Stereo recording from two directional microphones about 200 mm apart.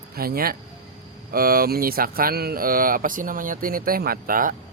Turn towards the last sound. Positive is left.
turn(degrees=-45)  # may be behind; listen again after turning